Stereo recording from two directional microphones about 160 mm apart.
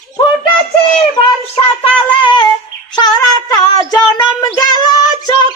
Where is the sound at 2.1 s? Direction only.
30° left (ahead or behind).